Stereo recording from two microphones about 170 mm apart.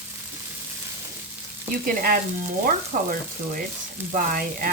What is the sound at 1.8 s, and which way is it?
Frying, 55° right (ahead or behind).